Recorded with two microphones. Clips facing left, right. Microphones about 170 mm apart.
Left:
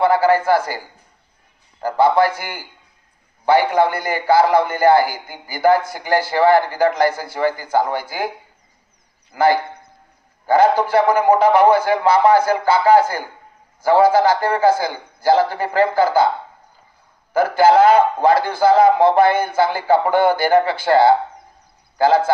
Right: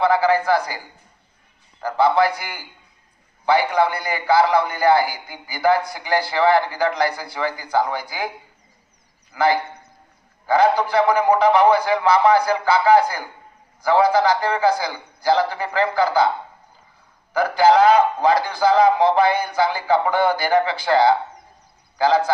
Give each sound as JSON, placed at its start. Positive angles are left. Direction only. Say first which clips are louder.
{"t": 0.0, "sound": "a man's voice", "louder": "left 3 dB", "side_deg": 50}
{"t": 1.8, "sound": "a man's voice", "louder": "left 2 dB", "side_deg": 45}
{"t": 9.3, "sound": "a man's voice", "louder": "left 3 dB", "side_deg": 50}
{"t": 17.3, "sound": "a man's voice", "louder": "left 2 dB", "side_deg": 50}